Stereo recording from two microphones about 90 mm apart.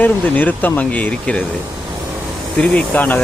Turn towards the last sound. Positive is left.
turn(degrees=15)  # may be behind; listen again after turning